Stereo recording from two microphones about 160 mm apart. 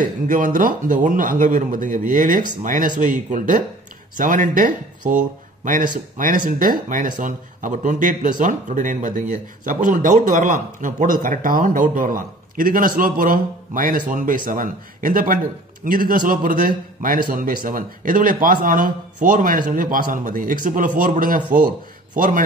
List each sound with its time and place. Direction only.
0.0 s a man's voice: 55° right (ahead or behind)